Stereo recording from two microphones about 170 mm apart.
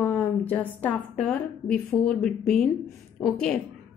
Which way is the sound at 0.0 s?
10° left (ahead or behind).